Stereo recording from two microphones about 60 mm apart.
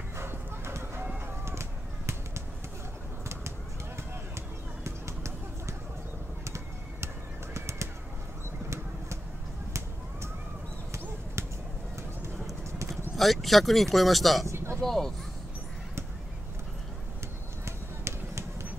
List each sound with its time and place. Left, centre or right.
0.1 s dog: right
1.2 s a sound: right
6.4 s typing: right
7.5 s bird: right
9.7 s a sound: right
13.1 s speech: centre
14.5 s vehicle: right
14.8 s speech: centre
17.6 s run: right